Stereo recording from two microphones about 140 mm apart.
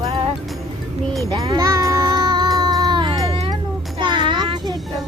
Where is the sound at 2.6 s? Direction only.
25° right (ahead or behind).